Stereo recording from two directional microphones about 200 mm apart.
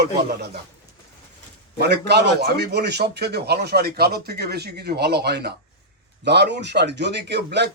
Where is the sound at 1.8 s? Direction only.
55° right (ahead or behind).